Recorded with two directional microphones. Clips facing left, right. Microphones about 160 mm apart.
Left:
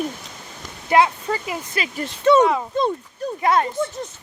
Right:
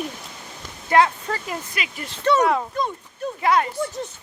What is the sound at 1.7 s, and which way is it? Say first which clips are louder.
Speech: left 5 dB; 35° left (ahead or behind).